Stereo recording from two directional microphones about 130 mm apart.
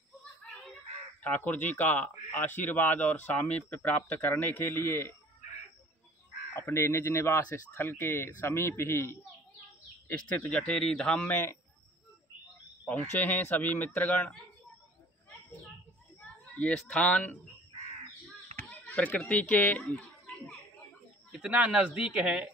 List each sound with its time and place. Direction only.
1.2 s a man's voice: 15° left (ahead or behind)
6.5 s a man's voice: 20° left (ahead or behind)
13.2 s a man's voice: 15° left (ahead or behind)
16.2 s speech: 10° left (ahead or behind)
18.7 s speech: 10° left (ahead or behind)
21.5 s a man's voice: 10° right (ahead or behind)